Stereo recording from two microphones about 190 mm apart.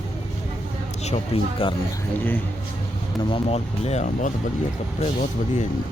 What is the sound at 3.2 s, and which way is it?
Speech, 30° left (ahead or behind).